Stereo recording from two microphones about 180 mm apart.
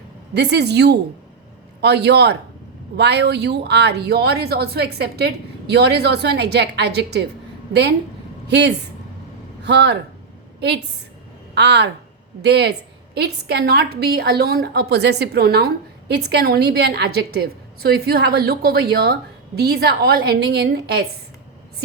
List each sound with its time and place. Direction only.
0.3 s a woman's voice: 65° right (ahead or behind)
11.5 s a woman's voice: 70° right (ahead or behind)